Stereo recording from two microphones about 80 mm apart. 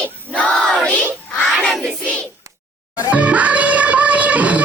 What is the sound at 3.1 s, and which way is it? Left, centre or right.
Music, centre.